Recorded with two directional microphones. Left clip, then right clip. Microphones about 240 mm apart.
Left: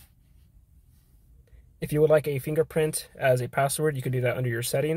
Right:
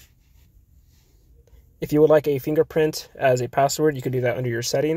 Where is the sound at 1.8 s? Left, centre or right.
Centre.